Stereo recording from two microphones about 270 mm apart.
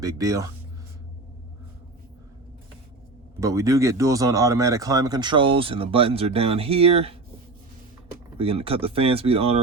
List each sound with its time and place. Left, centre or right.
0.0 s speech: centre
3.4 s speech: centre
8.4 s speech: right